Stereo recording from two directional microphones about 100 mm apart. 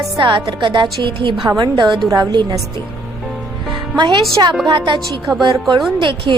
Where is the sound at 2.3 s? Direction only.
50° right (ahead or behind).